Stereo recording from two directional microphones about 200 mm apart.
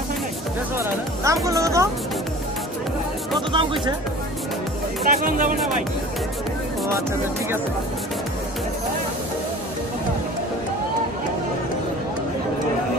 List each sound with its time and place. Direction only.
0.7 s speech: 15° right (ahead or behind)
3.3 s speech: 25° right (ahead or behind)
5.0 s speech: 45° right (ahead or behind)